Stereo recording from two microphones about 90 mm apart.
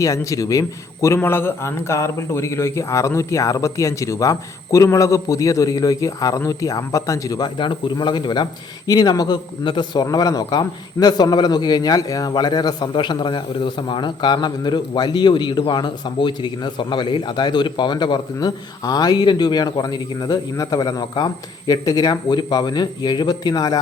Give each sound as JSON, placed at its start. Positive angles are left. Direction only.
{"t": 0.0, "sound": "a man's voice", "side_deg": 35}
{"t": 1.0, "sound": "a man's voice", "side_deg": 30}
{"t": 8.9, "sound": "a man's voice", "side_deg": 45}